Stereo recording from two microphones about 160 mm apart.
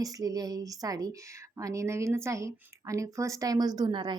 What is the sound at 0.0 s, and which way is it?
Speech, 20° right (ahead or behind).